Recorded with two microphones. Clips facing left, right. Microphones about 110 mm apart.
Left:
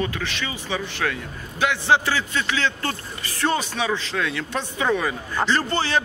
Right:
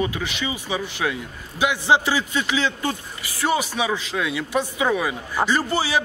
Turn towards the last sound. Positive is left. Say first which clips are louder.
# right 1 dB
turn(degrees=-10)  # may be behind; listen again after turning